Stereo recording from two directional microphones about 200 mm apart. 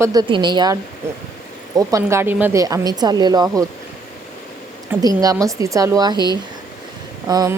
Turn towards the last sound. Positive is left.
turn(degrees=-20)  # may be behind; listen again after turning